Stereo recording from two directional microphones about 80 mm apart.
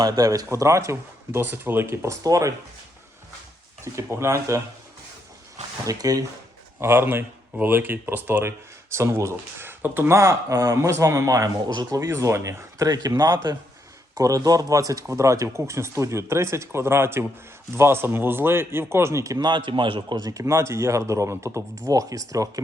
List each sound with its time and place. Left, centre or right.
0.0 s speech: right
2.2 s speech: right
3.9 s speech: right
5.8 s speech: right
6.7 s speech: right
9.0 s speech: right
10.2 s speech: right
12.9 s speech: right
19.4 s a man's voice: right
20.2 s speech: right